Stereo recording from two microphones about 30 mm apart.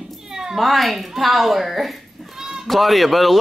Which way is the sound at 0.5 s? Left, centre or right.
Centre.